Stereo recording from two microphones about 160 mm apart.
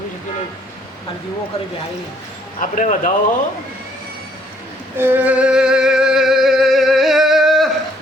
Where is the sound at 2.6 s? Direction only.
55° left (ahead or behind).